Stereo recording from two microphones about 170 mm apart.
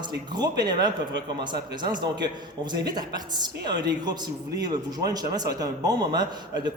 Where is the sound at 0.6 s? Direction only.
25° right (ahead or behind).